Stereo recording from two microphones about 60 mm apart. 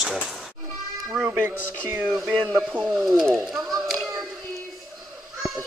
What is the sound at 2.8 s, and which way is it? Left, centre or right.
Speech, centre.